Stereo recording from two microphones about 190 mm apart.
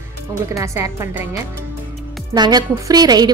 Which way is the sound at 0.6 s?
15° right (ahead or behind).